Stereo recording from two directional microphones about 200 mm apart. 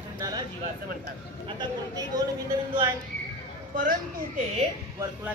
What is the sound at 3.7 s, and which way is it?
Speech, 45° right (ahead or behind).